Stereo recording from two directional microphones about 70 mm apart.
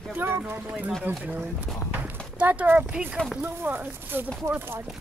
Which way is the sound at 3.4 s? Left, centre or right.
Right.